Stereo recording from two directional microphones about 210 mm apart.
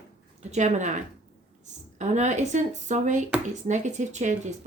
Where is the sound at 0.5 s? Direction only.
35° right (ahead or behind).